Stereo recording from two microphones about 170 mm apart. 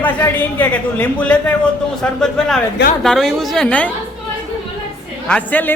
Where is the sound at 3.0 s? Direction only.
Centre (ahead or behind).